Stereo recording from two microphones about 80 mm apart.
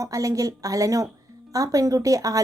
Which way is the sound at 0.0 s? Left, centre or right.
Right.